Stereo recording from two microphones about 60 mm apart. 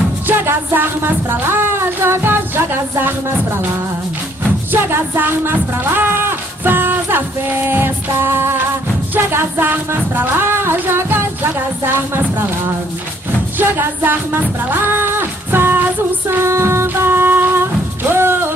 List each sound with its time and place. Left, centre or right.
0.3 s music: right
4.7 s speech: right
9.1 s music: right
13.6 s music: right